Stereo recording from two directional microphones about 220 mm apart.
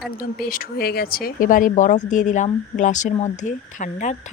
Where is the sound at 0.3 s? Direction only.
45° left (ahead or behind).